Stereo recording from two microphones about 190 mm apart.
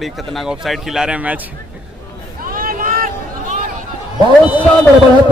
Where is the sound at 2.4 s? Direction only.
50° right (ahead or behind).